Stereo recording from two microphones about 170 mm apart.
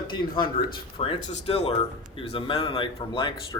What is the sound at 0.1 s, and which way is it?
Speech, 30° left (ahead or behind).